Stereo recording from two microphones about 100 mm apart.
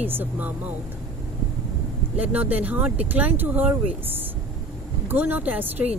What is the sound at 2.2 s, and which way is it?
Speech, 15° right (ahead or behind).